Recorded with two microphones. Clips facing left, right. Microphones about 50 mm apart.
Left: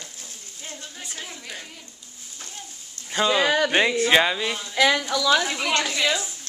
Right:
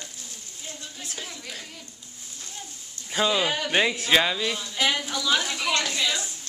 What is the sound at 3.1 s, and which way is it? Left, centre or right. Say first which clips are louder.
Speech: left 1 dB; centre.